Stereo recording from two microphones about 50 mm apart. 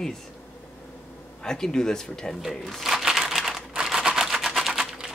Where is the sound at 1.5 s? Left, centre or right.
Centre.